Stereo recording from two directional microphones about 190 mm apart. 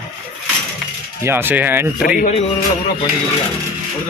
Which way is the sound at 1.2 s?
10° right (ahead or behind).